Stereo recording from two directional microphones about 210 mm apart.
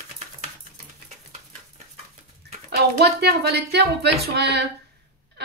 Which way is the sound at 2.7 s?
50° right (ahead or behind).